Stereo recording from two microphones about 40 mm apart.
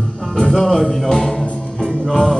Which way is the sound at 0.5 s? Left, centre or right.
Centre.